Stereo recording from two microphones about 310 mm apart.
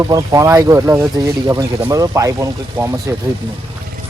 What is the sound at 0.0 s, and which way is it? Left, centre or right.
Speech, centre.